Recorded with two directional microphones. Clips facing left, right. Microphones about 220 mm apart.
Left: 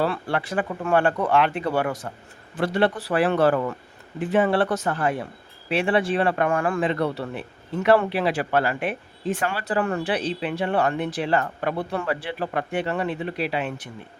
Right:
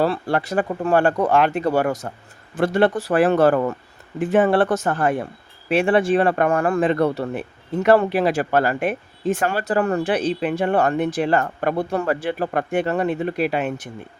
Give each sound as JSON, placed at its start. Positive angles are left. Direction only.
{"t": 0.0, "sound": "speech", "side_deg": -40}